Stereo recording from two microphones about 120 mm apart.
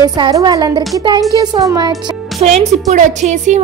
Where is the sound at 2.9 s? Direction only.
85° right.